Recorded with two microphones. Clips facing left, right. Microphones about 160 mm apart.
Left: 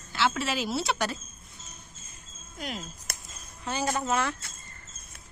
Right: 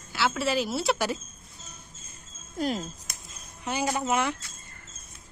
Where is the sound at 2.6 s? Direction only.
35° right (ahead or behind).